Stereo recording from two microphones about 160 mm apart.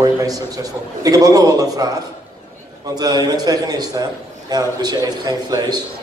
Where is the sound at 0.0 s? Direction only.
20° right (ahead or behind).